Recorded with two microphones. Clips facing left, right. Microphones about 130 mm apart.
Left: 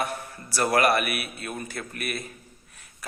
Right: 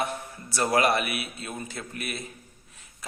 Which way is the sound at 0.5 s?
20° right (ahead or behind).